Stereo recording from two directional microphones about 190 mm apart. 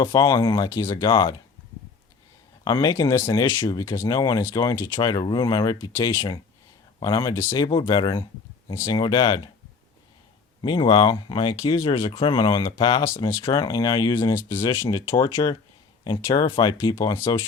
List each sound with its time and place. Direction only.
0.0 s speech: 20° left (ahead or behind)
2.6 s speech: 20° left (ahead or behind)
10.6 s speech: 25° left (ahead or behind)